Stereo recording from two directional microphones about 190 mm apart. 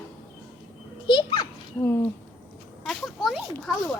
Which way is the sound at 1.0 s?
25° left (ahead or behind).